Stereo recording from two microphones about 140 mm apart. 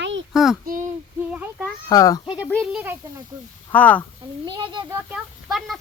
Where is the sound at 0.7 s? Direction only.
70° right (ahead or behind).